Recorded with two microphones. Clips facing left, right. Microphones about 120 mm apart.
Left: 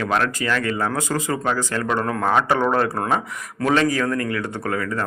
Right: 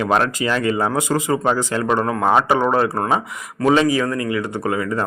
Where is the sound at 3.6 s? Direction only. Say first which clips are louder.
Right 3 dB; 15° right (ahead or behind).